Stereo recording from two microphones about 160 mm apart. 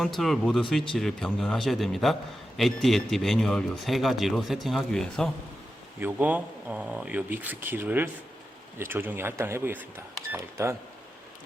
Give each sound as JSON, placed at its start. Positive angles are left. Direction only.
{"t": 0.2, "sound": "a man's voice", "side_deg": 0}
{"t": 6.0, "sound": "speech", "side_deg": -10}